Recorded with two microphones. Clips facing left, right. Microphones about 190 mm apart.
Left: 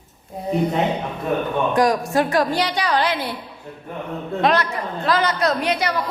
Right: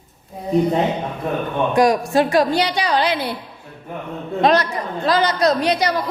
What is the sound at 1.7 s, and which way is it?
A woman's voice, 10° right (ahead or behind).